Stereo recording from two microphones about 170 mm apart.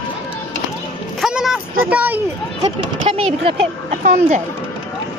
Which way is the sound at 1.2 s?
Centre (ahead or behind).